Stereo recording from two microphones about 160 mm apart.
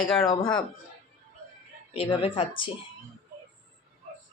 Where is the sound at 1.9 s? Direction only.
35° left (ahead or behind).